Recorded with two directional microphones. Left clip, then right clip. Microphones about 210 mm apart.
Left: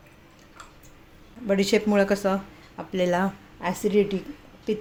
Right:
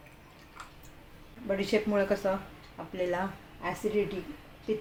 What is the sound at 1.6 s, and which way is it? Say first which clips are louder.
Speech: left 6 dB; 45° left (ahead or behind).